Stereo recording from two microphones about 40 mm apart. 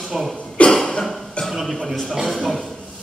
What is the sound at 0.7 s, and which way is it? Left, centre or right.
Cough, centre.